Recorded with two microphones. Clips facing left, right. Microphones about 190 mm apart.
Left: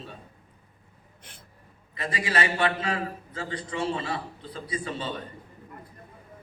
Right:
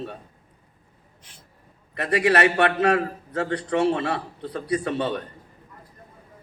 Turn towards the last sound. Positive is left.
turn(degrees=-65)  # may be behind; listen again after turning